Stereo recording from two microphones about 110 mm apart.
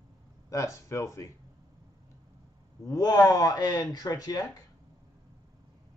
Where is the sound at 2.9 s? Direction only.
35° left (ahead or behind).